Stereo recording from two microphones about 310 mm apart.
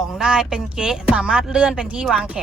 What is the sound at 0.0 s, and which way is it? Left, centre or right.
Speech, centre.